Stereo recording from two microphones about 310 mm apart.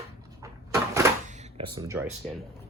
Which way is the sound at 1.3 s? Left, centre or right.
Centre.